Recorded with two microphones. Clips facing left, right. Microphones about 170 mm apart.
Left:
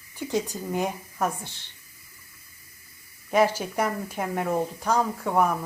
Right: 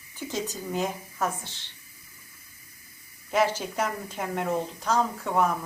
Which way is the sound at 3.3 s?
10° left (ahead or behind).